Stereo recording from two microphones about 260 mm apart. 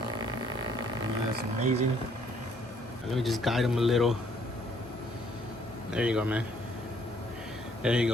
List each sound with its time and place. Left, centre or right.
1.4 s speech: right
3.1 s speech: centre
5.9 s speech: centre
7.8 s speech: centre